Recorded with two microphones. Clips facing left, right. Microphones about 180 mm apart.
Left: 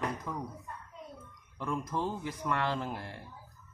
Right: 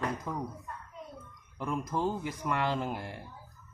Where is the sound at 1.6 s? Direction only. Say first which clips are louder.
Right 2 dB; 15° right (ahead or behind).